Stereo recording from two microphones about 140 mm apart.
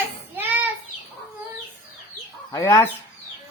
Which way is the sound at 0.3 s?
15° right (ahead or behind).